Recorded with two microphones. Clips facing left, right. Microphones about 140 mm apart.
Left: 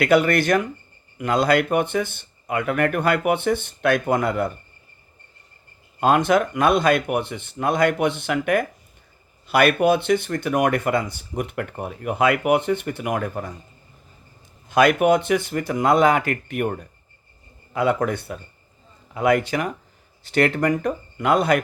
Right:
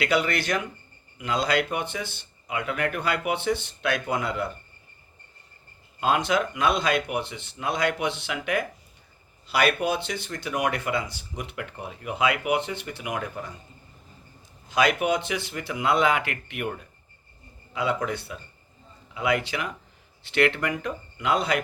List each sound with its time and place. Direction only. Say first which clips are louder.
0.0 s speech: left 7 dB; 50° left (ahead or behind)
6.0 s speech: left 6 dB; 50° left (ahead or behind)
14.7 s speech: left 7 dB; 55° left (ahead or behind)